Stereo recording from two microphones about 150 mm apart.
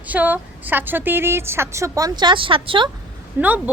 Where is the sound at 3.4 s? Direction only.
15° right (ahead or behind).